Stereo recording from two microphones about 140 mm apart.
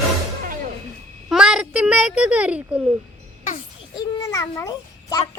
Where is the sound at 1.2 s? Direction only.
5° right (ahead or behind).